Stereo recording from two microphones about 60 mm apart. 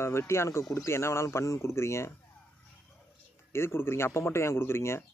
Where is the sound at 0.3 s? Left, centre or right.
Left.